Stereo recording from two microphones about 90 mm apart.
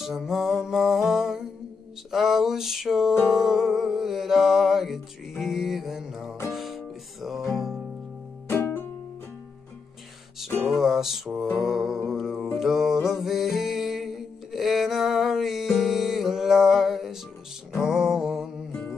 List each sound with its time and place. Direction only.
0.0 s music: 5° right (ahead or behind)
8.5 s music: 25° left (ahead or behind)
10.7 s music: 5° right (ahead or behind)